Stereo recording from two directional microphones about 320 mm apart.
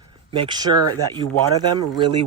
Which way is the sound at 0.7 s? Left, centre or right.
Right.